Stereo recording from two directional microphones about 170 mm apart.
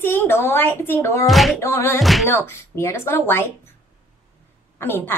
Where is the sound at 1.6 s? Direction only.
15° left (ahead or behind).